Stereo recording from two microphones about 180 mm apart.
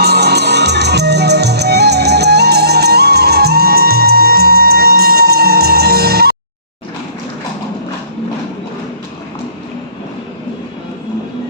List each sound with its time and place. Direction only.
0.0 s music: 65° right (ahead or behind)